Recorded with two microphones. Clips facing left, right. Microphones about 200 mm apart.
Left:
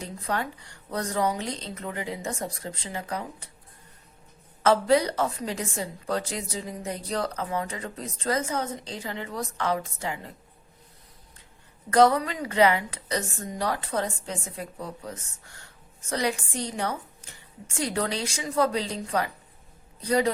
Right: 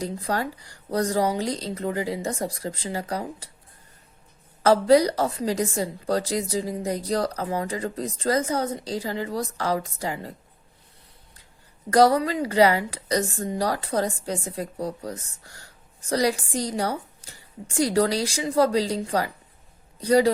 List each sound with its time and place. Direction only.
0.0 s a woman's voice: 35° right (ahead or behind)
4.6 s a woman's voice: 35° right (ahead or behind)
11.9 s a woman's voice: 35° right (ahead or behind)